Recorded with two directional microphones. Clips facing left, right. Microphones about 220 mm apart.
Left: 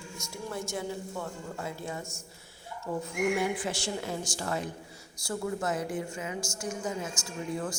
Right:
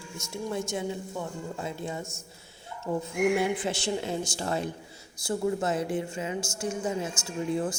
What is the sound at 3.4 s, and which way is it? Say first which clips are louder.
A woman's voice: right 3 dB; 25° right (ahead or behind).